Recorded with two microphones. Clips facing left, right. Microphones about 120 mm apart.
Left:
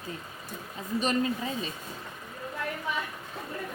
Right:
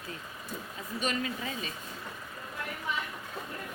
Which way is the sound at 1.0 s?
35° left (ahead or behind).